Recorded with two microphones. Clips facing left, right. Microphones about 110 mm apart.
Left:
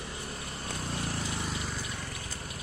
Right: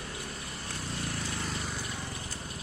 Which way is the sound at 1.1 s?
20° left (ahead or behind).